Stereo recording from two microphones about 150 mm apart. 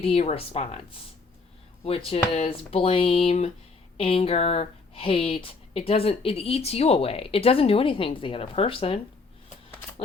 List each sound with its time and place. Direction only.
0.0 s speech: 40° left (ahead or behind)
1.8 s speech: 40° left (ahead or behind)